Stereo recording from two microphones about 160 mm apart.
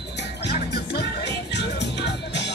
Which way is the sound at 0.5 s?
90° left.